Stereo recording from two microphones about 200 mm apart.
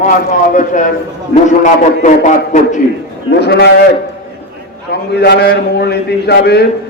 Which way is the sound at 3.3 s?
55° left (ahead or behind).